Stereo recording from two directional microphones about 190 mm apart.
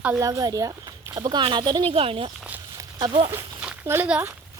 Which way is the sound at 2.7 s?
20° right (ahead or behind).